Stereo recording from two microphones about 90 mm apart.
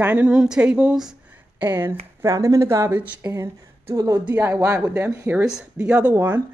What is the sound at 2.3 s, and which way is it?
Speech, 35° right (ahead or behind).